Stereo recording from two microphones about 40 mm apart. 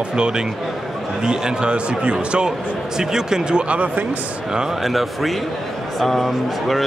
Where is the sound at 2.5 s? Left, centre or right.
Centre; by 4.0 s right.